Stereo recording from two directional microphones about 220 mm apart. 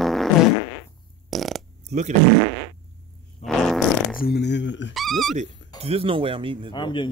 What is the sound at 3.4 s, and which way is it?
Fart, centre (ahead or behind).